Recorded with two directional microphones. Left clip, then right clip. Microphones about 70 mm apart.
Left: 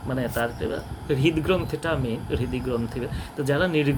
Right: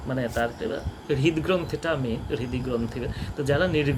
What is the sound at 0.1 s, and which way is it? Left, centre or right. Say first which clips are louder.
Speech: even; centre.